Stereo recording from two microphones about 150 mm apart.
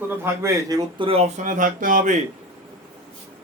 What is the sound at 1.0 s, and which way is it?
Speech, 40° right (ahead or behind).